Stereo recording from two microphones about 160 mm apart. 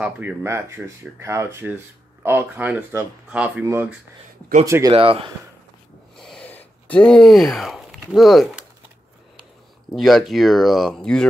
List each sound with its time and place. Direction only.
0.0 s speech: 15° right (ahead or behind)
4.9 s speech: 35° right (ahead or behind)
6.1 s a sound: 5° left (ahead or behind)
9.9 s speech: centre (ahead or behind)